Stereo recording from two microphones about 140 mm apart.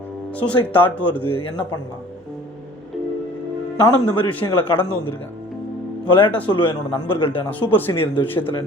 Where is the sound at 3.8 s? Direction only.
35° left (ahead or behind).